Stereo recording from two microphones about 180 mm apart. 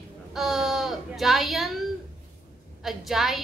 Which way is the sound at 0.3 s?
Centre (ahead or behind).